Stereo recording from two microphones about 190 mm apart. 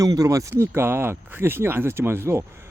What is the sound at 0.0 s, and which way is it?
Speech, 20° right (ahead or behind).